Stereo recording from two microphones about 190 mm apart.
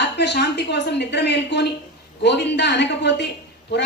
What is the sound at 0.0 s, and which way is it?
A woman's voice, 65° left (ahead or behind).